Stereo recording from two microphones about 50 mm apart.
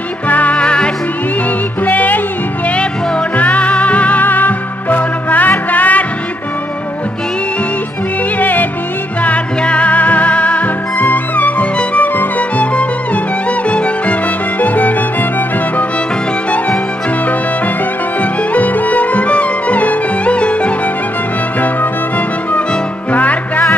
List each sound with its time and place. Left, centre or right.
0.3 s music: left
1.9 s music: left
3.3 s music: left
8.4 s music: left
9.2 s music: left
16.4 s music: left
18.2 s music: left
23.1 s music: left